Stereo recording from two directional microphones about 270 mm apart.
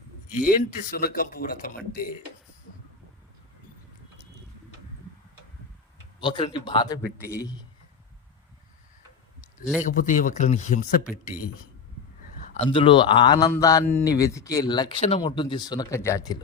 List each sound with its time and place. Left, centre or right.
0.4 s speech: left
6.1 s speech: centre
9.9 s speech: left
12.5 s speech: centre